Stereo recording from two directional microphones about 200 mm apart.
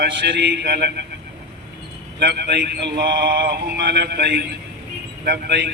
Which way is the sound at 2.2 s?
55° right (ahead or behind).